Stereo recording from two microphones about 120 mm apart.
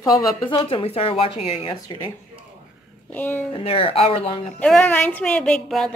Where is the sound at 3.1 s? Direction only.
15° left (ahead or behind).